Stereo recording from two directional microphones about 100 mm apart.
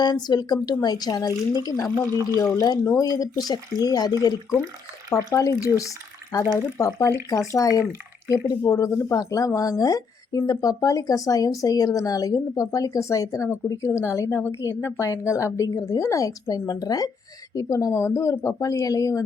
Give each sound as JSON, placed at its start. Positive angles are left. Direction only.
{"t": 0.0, "sound": "speech", "side_deg": 45}
{"t": 5.3, "sound": "a woman's voice", "side_deg": 35}